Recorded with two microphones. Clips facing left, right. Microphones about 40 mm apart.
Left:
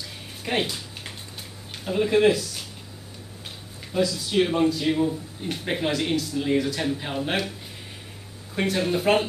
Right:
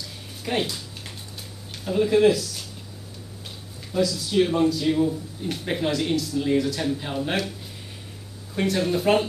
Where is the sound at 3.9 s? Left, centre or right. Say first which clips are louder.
Right 1 dB; centre.